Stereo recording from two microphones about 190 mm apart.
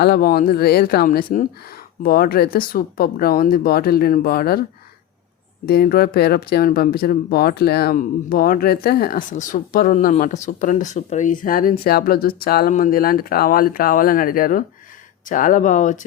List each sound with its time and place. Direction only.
0.0 s speech: 55° left (ahead or behind)
5.6 s speech: 55° left (ahead or behind)